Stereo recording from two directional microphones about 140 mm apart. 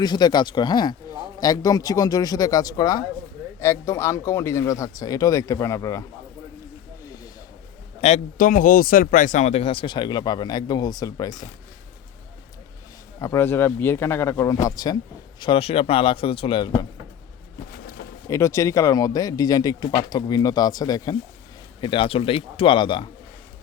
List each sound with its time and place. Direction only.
0.0 s speech: 30° left (ahead or behind)
8.0 s a man's voice: 50° left (ahead or behind)
8.4 s speech: 80° left; by 11.4 s 25° left (ahead or behind)
13.1 s speech: 20° left (ahead or behind)
15.4 s speech: 40° left (ahead or behind)
18.3 s speech: 20° left (ahead or behind)